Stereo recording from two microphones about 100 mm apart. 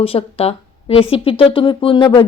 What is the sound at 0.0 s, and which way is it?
A woman's voice, 75° left (ahead or behind).